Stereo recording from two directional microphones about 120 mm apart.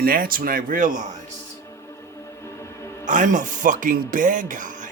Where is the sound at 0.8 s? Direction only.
90° right.